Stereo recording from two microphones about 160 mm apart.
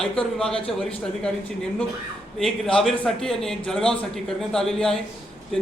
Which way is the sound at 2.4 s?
5° left (ahead or behind).